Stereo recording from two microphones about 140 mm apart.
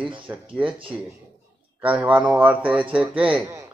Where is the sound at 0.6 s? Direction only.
40° right (ahead or behind).